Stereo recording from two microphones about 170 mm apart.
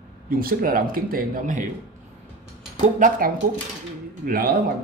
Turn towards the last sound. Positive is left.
turn(degrees=-60)  # may be behind; listen again after turning